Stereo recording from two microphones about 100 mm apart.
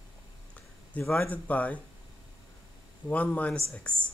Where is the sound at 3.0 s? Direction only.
15° left (ahead or behind).